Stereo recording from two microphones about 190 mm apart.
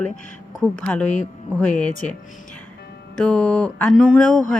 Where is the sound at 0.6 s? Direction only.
5° left (ahead or behind).